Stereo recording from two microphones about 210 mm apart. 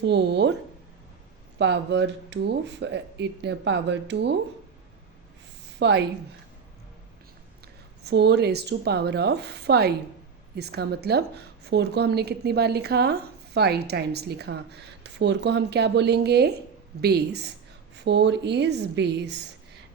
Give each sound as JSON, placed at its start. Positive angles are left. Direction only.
{"t": 0.0, "sound": "a woman's voice", "side_deg": -55}
{"t": 1.5, "sound": "speech", "side_deg": -55}
{"t": 5.8, "sound": "speech", "side_deg": -55}
{"t": 8.0, "sound": "a woman's voice", "side_deg": -55}